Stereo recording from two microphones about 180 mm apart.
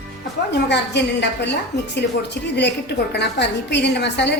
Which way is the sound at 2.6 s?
70° left (ahead or behind).